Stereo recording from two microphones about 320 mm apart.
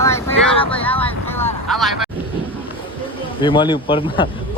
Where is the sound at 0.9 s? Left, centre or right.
Centre.